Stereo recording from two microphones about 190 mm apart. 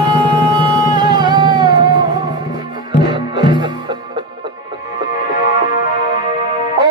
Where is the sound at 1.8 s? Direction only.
65° left (ahead or behind).